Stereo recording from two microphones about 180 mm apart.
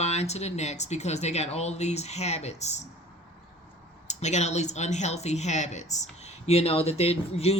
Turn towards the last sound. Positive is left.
turn(degrees=35)  # may be behind; listen again after turning